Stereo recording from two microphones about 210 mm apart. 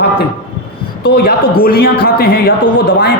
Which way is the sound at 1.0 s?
45° left (ahead or behind).